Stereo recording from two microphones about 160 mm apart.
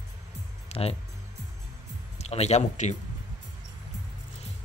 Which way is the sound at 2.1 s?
45° left (ahead or behind).